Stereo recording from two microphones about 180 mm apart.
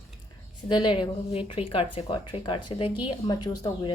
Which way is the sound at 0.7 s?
25° left (ahead or behind).